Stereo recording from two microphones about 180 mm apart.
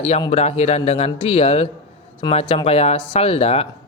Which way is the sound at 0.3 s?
35° left (ahead or behind).